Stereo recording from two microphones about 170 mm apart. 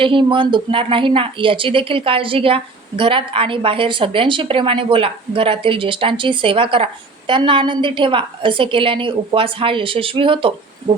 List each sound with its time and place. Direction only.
0.0 s speech: 30° right (ahead or behind)